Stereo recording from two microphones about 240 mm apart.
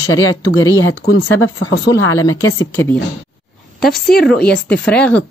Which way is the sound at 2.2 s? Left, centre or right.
Centre.